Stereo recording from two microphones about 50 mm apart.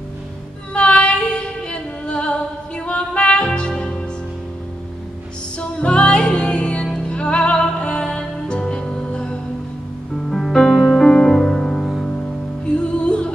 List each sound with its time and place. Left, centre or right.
0.7 s music: left
5.6 s music: left
10.3 s music: centre
12.7 s music: left